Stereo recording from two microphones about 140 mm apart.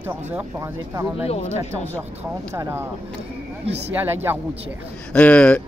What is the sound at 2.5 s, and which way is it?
Speech, 20° right (ahead or behind).